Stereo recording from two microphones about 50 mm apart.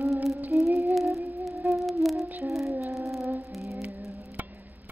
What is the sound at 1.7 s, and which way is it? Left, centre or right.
Humming, centre.